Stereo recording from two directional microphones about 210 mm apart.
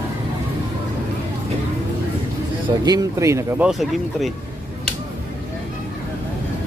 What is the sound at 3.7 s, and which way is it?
Speech, centre (ahead or behind).